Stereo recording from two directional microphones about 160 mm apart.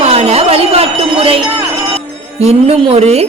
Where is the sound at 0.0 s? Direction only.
40° right (ahead or behind).